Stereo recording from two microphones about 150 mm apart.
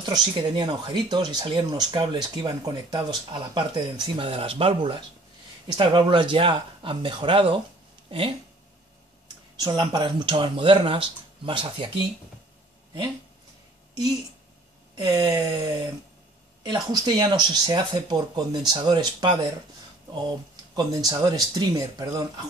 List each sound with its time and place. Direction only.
0.0 s speech: 30° right (ahead or behind)
9.6 s speech: 30° right (ahead or behind)
15.0 s speech: 25° right (ahead or behind)
16.6 s speech: 25° right (ahead or behind)